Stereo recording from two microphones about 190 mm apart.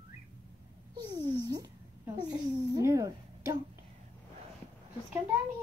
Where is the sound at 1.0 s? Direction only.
20° right (ahead or behind).